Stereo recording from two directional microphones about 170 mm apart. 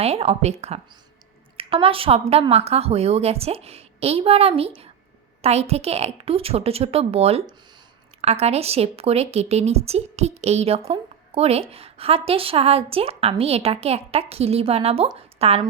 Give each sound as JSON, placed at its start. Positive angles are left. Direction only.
{"t": 0.0, "sound": "a woman's voice", "side_deg": -35}